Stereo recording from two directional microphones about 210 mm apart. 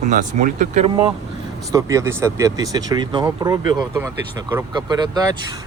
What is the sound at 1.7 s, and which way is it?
Speech, 15° right (ahead or behind).